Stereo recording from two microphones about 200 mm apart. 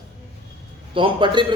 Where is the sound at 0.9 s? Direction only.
25° right (ahead or behind).